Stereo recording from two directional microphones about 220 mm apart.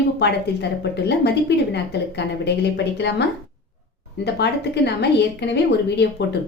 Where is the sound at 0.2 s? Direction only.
50° left (ahead or behind).